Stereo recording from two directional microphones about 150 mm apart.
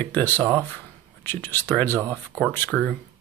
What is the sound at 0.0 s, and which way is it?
Speech, 15° left (ahead or behind).